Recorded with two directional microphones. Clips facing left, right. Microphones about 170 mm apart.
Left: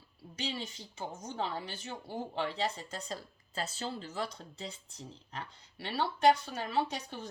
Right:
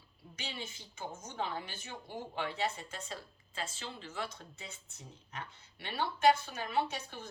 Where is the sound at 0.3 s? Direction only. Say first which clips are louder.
Left 6 dB; 35° left (ahead or behind).